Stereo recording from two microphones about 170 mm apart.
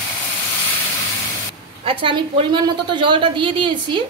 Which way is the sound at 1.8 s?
30° right (ahead or behind).